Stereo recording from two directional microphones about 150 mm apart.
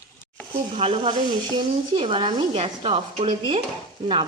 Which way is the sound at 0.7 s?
40° right (ahead or behind).